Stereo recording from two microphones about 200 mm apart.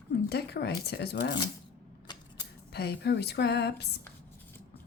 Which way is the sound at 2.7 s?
55° left (ahead or behind).